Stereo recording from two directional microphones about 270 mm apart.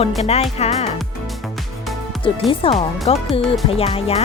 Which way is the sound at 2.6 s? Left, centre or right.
Centre.